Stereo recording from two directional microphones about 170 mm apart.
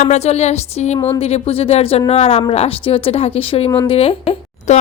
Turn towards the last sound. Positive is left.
turn(degrees=40)  # may be behind; listen again after turning